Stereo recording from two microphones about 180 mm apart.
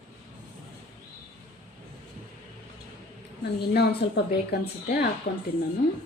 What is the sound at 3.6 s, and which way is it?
A woman's voice, 65° left (ahead or behind).